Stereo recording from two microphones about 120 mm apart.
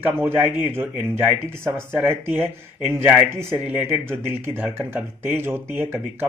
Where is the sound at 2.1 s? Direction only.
20° right (ahead or behind).